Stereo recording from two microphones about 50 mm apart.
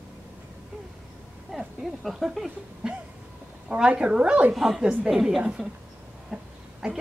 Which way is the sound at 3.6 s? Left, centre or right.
Centre.